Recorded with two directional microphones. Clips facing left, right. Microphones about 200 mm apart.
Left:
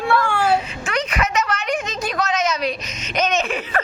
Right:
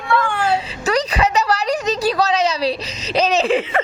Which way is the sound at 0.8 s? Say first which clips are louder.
Right 5 dB; 35° right (ahead or behind).